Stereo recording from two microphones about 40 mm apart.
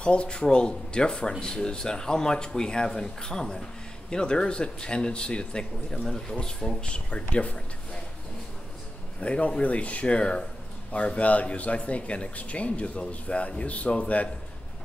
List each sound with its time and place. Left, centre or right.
0.0 s speech: left
9.2 s speech: left